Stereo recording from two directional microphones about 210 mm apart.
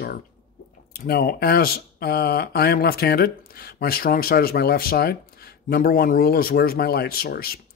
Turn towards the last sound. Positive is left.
turn(degrees=45)  # may be behind; listen again after turning